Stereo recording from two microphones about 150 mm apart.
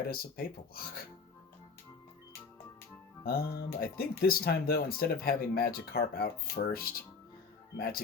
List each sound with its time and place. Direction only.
0.1 s speech: 80° left
3.2 s speech: 85° left